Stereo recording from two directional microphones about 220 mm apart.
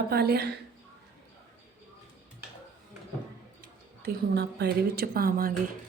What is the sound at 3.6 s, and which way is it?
A woman's voice, 45° right (ahead or behind).